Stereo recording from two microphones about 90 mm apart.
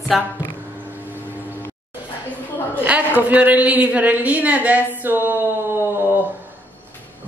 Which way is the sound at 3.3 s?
15° right (ahead or behind).